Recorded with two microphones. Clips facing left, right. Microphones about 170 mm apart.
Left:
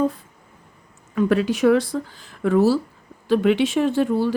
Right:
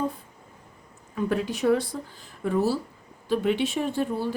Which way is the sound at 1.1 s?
90° left.